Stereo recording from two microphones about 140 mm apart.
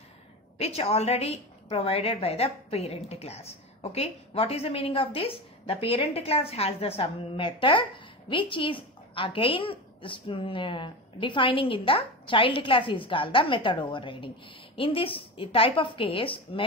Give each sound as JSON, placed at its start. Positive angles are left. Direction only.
{"t": 0.6, "sound": "a woman's voice", "side_deg": 45}